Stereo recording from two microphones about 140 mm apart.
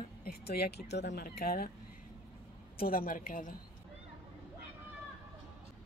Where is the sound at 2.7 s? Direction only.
90° left.